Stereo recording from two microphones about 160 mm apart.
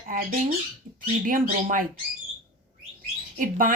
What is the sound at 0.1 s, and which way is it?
Speech, 60° right (ahead or behind).